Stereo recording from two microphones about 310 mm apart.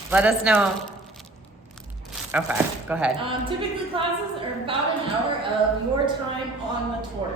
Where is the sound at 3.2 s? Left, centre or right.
Centre.